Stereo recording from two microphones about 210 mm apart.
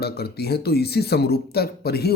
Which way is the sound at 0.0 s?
50° left (ahead or behind).